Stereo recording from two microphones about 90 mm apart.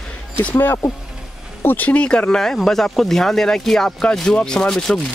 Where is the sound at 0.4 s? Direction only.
20° left (ahead or behind).